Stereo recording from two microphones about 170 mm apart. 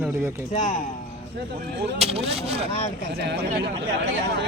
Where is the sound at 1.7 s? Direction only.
90° right.